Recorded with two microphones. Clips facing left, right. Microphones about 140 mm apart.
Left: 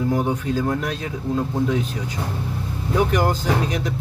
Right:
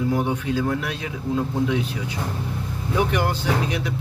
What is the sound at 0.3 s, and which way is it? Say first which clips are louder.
Speech: left 1 dB; 40° left (ahead or behind).